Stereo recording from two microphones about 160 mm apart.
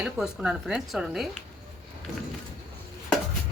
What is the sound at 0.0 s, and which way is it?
Speech, 5° right (ahead or behind).